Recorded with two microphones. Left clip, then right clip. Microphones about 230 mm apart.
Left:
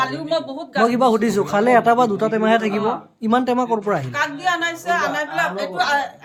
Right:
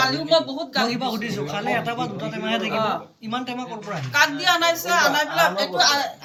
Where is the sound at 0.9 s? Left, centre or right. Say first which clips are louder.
Left 9 dB; left.